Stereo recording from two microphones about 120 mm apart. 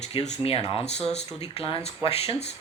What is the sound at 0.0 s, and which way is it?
Speech, 70° left (ahead or behind).